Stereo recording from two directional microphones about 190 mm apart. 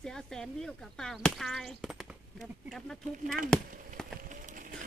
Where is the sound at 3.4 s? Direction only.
5° left (ahead or behind).